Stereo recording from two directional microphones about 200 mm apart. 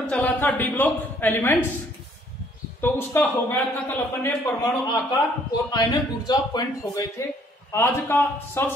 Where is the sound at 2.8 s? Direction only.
10° left (ahead or behind).